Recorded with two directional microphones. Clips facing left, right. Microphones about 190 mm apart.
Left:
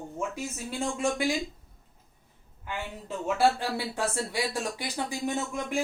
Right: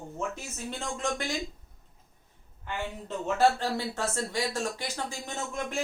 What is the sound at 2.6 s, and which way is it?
Speech, 10° left (ahead or behind).